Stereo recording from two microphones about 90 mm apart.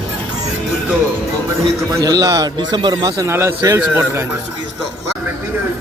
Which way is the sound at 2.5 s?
55° right (ahead or behind).